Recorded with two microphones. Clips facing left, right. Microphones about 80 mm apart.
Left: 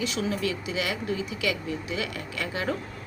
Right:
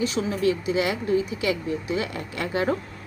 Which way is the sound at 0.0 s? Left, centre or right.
Right.